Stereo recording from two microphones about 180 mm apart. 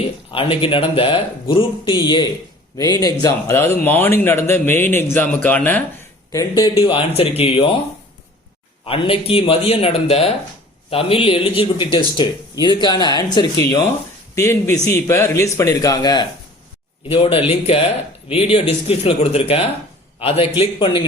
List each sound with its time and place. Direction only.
0.3 s a man's voice: 30° left (ahead or behind); by 5.8 s 10° left (ahead or behind)
6.6 s a man's voice: 30° left (ahead or behind)
8.8 s a man's voice: 30° left (ahead or behind)